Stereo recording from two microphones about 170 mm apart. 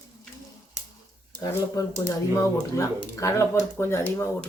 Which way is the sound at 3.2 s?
15° left (ahead or behind).